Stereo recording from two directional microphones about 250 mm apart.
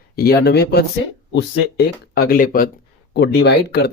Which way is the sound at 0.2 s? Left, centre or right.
Left.